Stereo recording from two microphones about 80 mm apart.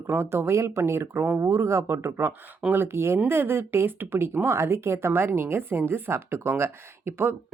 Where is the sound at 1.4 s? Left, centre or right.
Right.